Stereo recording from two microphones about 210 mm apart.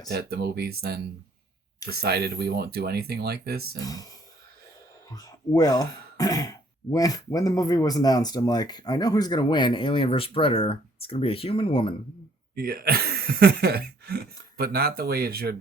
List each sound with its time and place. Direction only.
0.1 s speech: 50° right (ahead or behind)
3.8 s speech: 15° left (ahead or behind)
5.1 s speech: 15° left (ahead or behind)
12.5 s speech: 45° right (ahead or behind)